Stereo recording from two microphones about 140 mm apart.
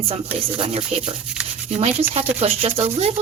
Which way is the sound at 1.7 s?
45° right (ahead or behind).